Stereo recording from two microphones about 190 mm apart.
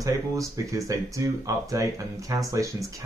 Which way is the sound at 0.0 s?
15° right (ahead or behind).